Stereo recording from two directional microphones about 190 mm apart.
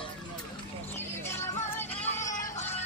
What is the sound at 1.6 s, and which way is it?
Music, 10° left (ahead or behind).